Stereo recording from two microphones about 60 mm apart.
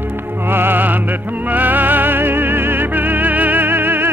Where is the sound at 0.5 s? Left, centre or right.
Right.